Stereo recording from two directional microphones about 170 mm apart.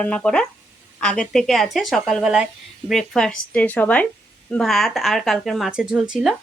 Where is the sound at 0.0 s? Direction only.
5° left (ahead or behind).